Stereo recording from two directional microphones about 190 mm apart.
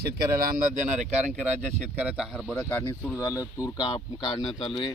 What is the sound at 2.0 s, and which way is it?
Speech, 5° right (ahead or behind).